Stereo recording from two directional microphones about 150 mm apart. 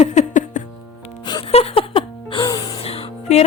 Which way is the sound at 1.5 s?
40° left (ahead or behind).